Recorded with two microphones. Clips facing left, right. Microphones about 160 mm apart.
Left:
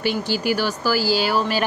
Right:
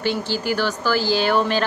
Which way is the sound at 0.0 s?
10° left (ahead or behind).